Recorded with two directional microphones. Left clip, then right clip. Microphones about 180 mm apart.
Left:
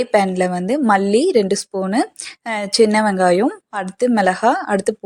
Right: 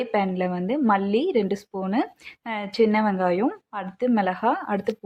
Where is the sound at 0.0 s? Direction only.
35° left (ahead or behind).